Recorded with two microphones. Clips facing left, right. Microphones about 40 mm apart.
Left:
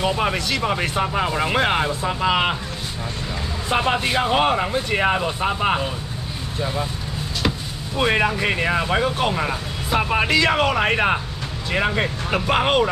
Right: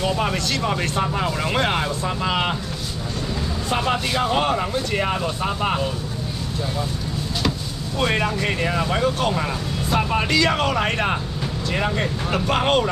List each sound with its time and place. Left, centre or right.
0.0 s speech: centre
3.7 s speech: left
8.0 s speech: centre